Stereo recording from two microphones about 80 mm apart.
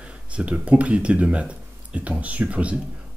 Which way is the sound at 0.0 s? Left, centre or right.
Centre.